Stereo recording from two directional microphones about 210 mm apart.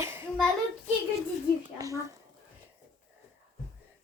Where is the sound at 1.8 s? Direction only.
15° right (ahead or behind).